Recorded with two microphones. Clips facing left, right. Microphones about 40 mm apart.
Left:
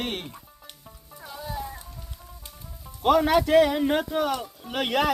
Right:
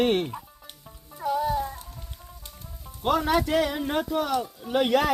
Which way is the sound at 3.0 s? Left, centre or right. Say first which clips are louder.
Left 3 dB; left.